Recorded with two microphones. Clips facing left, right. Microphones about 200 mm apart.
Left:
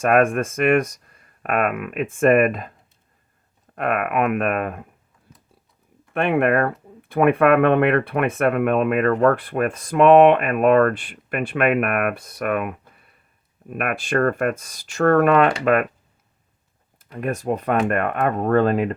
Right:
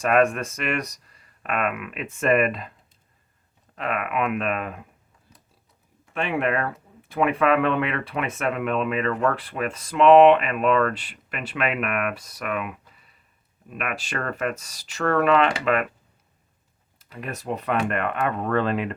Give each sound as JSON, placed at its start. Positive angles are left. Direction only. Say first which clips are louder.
{"t": 0.0, "sound": "speech", "louder": "left 3 dB", "side_deg": 50}
{"t": 3.8, "sound": "speech", "louder": "left 5 dB", "side_deg": 55}
{"t": 6.1, "sound": "speech", "louder": "left 6 dB", "side_deg": 55}
{"t": 17.0, "sound": "speech", "louder": "left 8 dB", "side_deg": 50}